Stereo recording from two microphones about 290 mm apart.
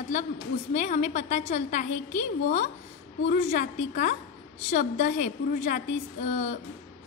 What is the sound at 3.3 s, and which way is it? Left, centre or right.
Speech, left.